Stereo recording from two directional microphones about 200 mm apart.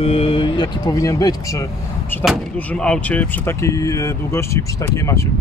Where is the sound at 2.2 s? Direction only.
5° left (ahead or behind).